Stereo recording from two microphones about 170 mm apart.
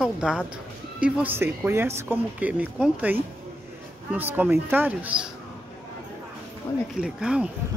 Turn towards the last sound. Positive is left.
turn(degrees=-5)  # may be behind; listen again after turning